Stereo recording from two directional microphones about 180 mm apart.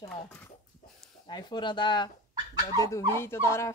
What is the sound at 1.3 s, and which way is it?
Speech, 25° left (ahead or behind).